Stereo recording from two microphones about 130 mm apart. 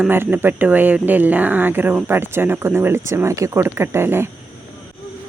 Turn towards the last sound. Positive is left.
turn(degrees=-20)  # may be behind; listen again after turning